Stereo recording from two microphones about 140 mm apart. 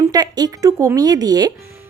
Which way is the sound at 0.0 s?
25° right (ahead or behind).